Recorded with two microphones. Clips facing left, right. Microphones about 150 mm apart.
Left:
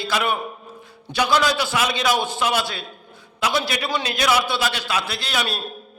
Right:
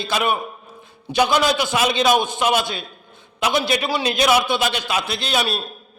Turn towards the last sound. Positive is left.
turn(degrees=-20)  # may be behind; listen again after turning